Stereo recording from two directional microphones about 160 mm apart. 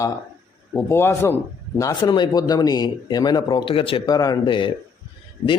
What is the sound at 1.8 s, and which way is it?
A man's voice, 25° left (ahead or behind).